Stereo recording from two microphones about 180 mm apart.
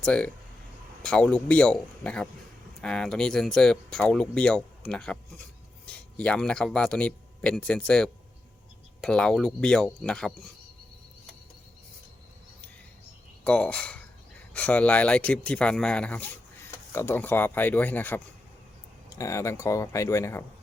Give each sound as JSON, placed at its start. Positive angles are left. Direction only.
{"t": 0.0, "sound": "speech", "side_deg": 5}
{"t": 13.4, "sound": "speech", "side_deg": 5}